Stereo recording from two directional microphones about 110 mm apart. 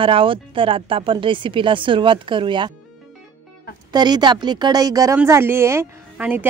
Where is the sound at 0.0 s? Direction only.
50° right (ahead or behind).